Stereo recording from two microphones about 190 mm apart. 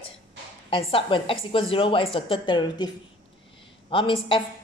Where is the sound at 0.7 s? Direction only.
30° left (ahead or behind).